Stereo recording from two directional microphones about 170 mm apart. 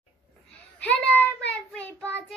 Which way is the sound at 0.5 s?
10° left (ahead or behind).